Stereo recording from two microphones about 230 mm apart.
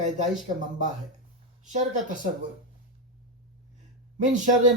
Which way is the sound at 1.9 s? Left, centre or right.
Right.